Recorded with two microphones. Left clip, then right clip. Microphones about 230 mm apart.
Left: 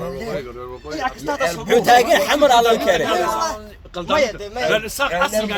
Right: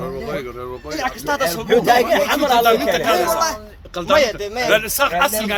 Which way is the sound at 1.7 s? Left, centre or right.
Left.